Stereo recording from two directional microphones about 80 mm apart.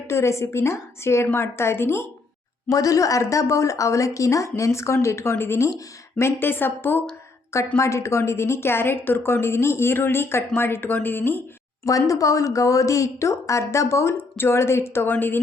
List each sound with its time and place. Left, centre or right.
0.1 s a woman's voice: left
2.6 s a woman's voice: left
7.8 s a woman's voice: left
11.9 s a woman's voice: left